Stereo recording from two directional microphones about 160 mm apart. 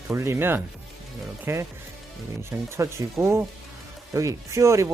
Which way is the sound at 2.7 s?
15° right (ahead or behind).